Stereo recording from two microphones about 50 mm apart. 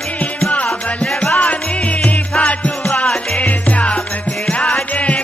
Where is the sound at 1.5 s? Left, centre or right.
Left.